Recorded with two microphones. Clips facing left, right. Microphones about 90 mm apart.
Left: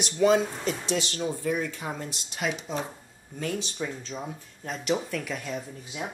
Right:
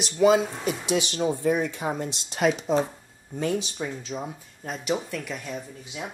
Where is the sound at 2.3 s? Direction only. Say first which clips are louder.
Right 8 dB; 40° right (ahead or behind).